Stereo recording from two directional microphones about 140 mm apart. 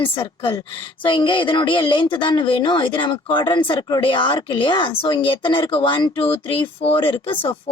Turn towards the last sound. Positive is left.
turn(degrees=40)  # may be behind; listen again after turning